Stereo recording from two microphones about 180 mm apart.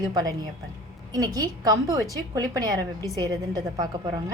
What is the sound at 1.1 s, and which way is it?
A woman's voice, 20° right (ahead or behind).